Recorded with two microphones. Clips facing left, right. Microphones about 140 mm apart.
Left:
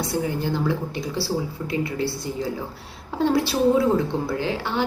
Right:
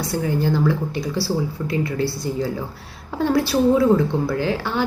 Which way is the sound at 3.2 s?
20° left (ahead or behind).